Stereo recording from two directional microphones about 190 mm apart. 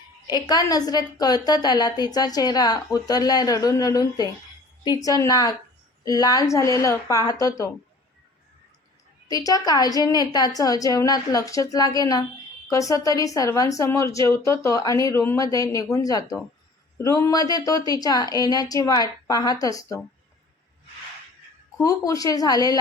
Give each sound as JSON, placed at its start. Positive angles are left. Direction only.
{"t": 0.3, "sound": "a woman's voice", "side_deg": 20}
{"t": 9.3, "sound": "a woman's voice", "side_deg": 20}
{"t": 21.8, "sound": "a woman's voice", "side_deg": 20}